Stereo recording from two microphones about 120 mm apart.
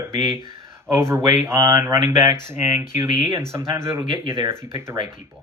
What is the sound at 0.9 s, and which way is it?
Speech, 20° right (ahead or behind).